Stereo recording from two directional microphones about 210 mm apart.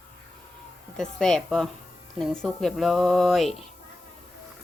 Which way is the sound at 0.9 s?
5° left (ahead or behind).